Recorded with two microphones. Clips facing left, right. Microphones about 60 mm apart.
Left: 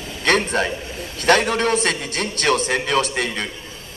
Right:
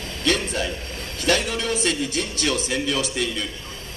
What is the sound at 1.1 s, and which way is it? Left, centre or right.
A man's voice, left.